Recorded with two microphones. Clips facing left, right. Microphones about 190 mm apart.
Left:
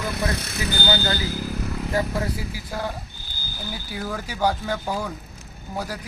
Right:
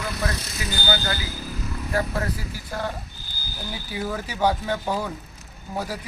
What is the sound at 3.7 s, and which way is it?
Speech, centre (ahead or behind).